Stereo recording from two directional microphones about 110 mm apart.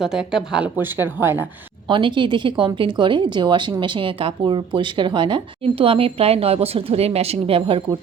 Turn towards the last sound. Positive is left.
turn(degrees=-55)  # may be behind; listen again after turning